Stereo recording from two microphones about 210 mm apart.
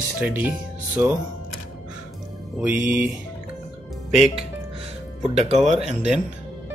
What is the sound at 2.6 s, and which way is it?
Speech, 5° right (ahead or behind).